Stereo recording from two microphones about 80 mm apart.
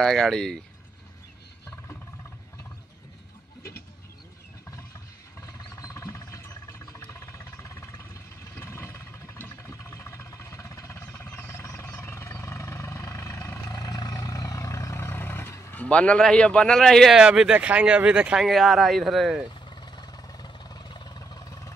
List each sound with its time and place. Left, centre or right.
0.0 s speech: centre
5.4 s a sound: left
8.5 s vehicle: left
11.0 s a sound: left
11.3 s vehicle: left
13.7 s vehicle: left
15.7 s a man's voice: centre
17.2 s speech: centre
19.7 s vehicle: left